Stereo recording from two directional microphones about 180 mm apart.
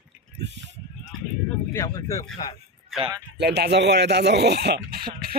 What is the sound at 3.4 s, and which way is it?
Speech, 65° right (ahead or behind).